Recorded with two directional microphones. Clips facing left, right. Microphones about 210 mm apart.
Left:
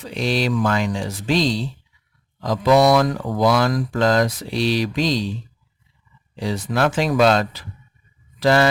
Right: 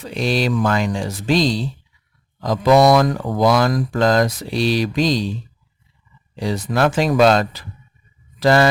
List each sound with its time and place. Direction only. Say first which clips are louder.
0.0 s speech: right 2 dB; 45° right (ahead or behind)
6.3 s speech: right 2 dB; 40° right (ahead or behind)